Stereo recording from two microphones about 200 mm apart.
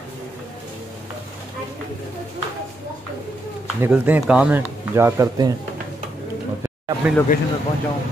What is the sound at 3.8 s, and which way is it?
Speech, 10° right (ahead or behind).